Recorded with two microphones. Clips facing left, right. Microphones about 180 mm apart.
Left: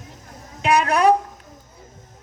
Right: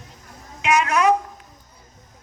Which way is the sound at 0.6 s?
35° left (ahead or behind).